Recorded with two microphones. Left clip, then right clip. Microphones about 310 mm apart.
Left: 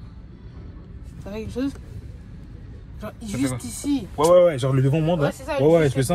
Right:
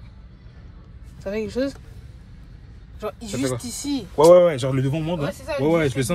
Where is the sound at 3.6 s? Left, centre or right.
Right.